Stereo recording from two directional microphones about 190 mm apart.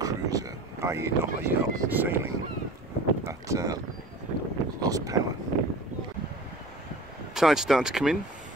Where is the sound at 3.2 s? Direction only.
15° right (ahead or behind).